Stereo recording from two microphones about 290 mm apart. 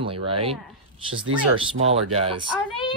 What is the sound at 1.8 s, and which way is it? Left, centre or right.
Speech, right.